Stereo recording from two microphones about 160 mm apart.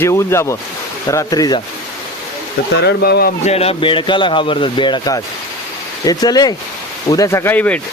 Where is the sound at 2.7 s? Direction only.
90° left.